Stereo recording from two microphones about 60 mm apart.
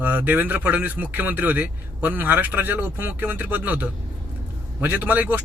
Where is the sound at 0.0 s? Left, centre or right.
Right.